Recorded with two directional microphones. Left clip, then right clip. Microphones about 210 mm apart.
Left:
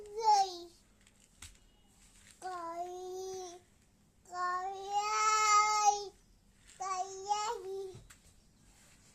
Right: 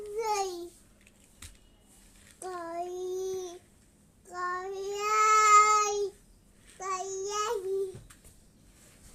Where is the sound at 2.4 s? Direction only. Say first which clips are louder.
Right 4 dB; 15° left (ahead or behind).